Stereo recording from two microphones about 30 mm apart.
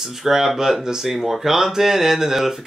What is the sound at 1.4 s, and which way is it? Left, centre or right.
Speech, centre.